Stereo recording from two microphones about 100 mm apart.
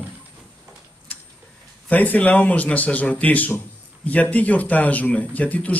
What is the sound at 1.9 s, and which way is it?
A man's voice, 15° left (ahead or behind).